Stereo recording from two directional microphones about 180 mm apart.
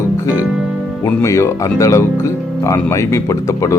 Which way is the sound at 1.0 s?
15° left (ahead or behind).